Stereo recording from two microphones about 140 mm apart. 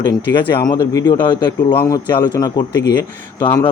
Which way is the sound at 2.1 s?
30° left (ahead or behind).